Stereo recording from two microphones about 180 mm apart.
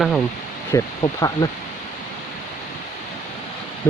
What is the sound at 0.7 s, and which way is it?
Speech, 20° left (ahead or behind).